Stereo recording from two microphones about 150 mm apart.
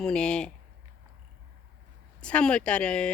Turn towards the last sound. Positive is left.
turn(degrees=5)  # may be behind; listen again after turning